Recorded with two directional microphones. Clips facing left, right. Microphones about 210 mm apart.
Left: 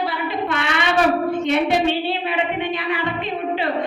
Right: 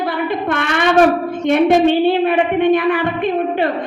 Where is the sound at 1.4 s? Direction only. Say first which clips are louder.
Right 10 dB; 50° right (ahead or behind).